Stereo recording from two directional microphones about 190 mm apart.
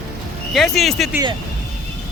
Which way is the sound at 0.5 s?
Centre (ahead or behind).